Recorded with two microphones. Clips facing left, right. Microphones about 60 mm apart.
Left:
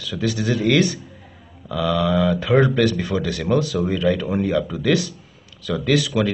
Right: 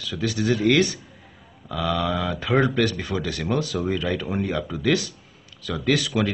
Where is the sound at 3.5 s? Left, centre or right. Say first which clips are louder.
Left 4 dB; centre.